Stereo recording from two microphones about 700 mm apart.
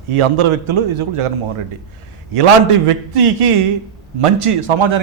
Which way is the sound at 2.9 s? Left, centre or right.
Right.